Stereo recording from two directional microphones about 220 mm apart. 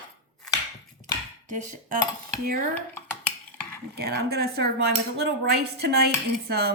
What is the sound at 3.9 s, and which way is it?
Speech, 45° right (ahead or behind).